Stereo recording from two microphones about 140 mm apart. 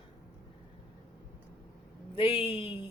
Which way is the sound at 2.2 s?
40° left (ahead or behind).